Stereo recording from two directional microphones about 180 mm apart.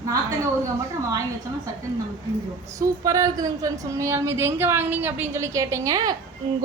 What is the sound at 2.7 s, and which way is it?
A woman's voice, 20° right (ahead or behind).